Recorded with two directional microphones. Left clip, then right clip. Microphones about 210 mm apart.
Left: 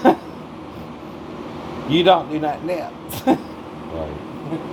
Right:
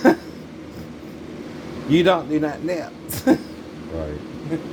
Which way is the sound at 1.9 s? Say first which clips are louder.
Left 2 dB; 55° right (ahead or behind).